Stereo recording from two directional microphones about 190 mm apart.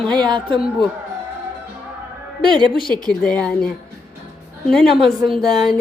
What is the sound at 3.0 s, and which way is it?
Speech, 5° left (ahead or behind).